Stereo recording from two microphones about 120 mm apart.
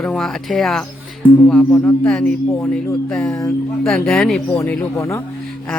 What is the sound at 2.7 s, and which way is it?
Speech, 5° left (ahead or behind).